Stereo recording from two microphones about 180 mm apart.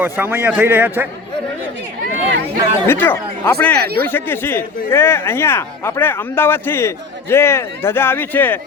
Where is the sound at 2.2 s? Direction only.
75° right (ahead or behind).